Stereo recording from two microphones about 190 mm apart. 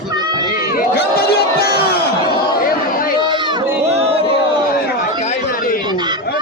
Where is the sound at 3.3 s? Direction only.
25° right (ahead or behind).